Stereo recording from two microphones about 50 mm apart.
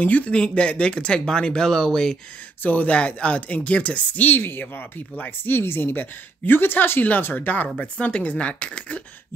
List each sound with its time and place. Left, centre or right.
0.0 s speech: left; by 2.1 s centre
2.6 s speech: left
4.4 s speech: left
5.4 s speech: left
7.6 s speech: left